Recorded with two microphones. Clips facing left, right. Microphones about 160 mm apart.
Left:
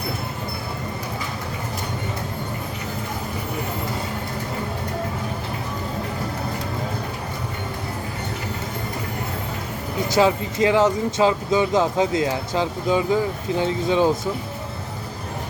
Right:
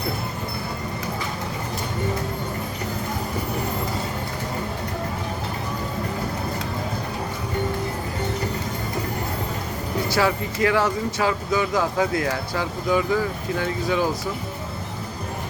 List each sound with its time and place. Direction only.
10.2 s speech: 20° left (ahead or behind)